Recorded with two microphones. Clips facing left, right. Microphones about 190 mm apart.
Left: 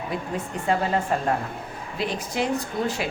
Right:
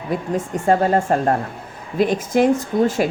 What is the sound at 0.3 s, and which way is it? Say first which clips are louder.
A woman's voice: right 7 dB; 45° right (ahead or behind).